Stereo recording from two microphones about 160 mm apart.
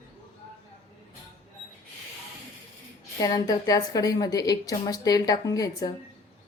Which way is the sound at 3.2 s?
25° left (ahead or behind).